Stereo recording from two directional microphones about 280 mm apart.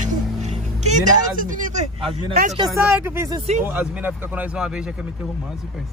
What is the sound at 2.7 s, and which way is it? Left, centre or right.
Speech, centre.